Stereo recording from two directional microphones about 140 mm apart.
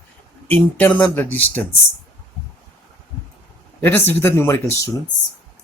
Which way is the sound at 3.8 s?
15° left (ahead or behind).